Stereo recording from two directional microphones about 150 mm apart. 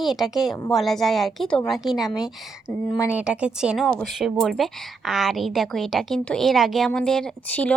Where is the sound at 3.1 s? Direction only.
10° right (ahead or behind).